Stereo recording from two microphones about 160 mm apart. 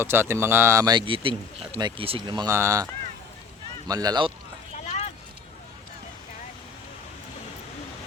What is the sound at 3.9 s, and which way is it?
Speech, 25° right (ahead or behind).